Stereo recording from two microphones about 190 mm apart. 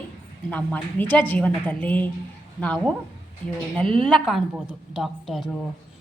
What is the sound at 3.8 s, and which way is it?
Speech, 25° right (ahead or behind).